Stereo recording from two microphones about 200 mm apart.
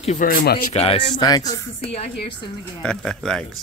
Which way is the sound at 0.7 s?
30° left (ahead or behind).